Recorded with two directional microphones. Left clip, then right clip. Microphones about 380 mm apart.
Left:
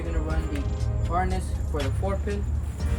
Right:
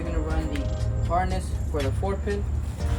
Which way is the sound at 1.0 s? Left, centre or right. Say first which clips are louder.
Right 2 dB; centre.